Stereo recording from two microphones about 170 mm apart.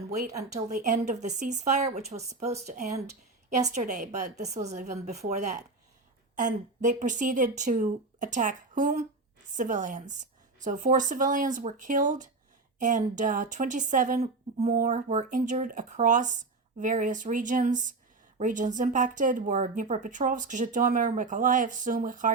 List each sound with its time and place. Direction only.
0.7 s a woman's voice: 50° right (ahead or behind)